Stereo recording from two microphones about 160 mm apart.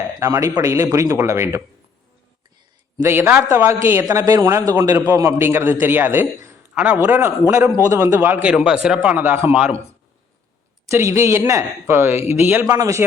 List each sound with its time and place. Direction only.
0.2 s a man's voice: 20° right (ahead or behind)
3.0 s a man's voice: 15° right (ahead or behind)
10.8 s a man's voice: 15° right (ahead or behind)